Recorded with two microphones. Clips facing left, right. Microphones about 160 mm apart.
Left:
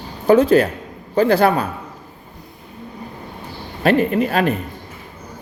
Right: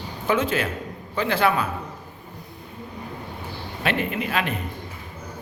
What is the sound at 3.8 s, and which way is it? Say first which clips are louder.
Speech: left 10 dB; 40° left (ahead or behind).